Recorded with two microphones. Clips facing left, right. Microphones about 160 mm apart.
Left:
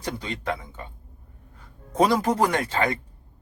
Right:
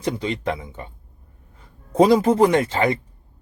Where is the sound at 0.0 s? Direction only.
25° right (ahead or behind).